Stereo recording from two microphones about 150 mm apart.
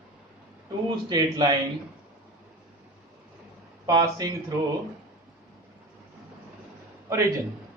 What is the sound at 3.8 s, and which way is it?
Speech, 25° right (ahead or behind).